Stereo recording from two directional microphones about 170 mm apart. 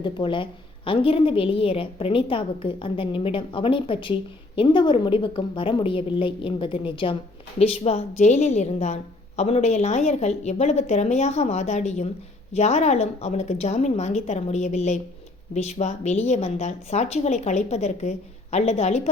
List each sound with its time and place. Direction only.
0.0 s a woman's voice: 30° left (ahead or behind)